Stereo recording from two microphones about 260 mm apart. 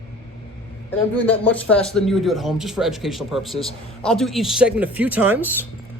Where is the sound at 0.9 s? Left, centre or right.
Centre.